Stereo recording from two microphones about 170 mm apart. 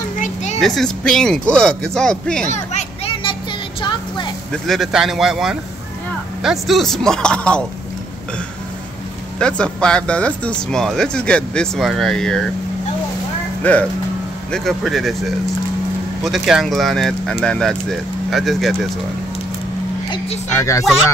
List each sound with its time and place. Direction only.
0.2 s a sound: 45° left (ahead or behind)
0.6 s speech: centre (ahead or behind)
2.5 s a sound: 40° left (ahead or behind)
4.5 s speech: centre (ahead or behind)
9.4 s speech: 5° left (ahead or behind)
13.6 s speech: 10° left (ahead or behind)
20.5 s speech: 15° left (ahead or behind)